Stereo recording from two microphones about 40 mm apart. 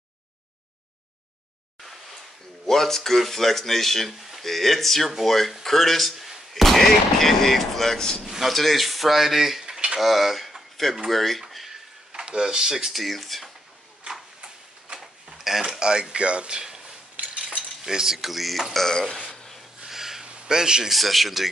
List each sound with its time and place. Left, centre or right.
2.6 s speech: centre
8.2 s speech: centre
9.7 s a sound: right
9.9 s speech: centre
11.5 s a sound: centre
12.1 s speech: centre
14.4 s tick-tock: centre
15.8 s speech: right
17.2 s cutlery: right
17.8 s speech: centre
19.3 s rub: centre
19.8 s a sound: centre
20.9 s speech: centre